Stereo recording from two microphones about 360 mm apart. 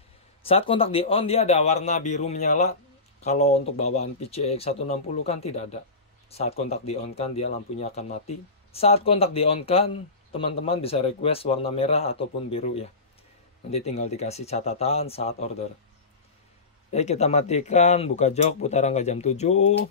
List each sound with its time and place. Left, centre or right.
0.5 s speech: centre
16.9 s speech: centre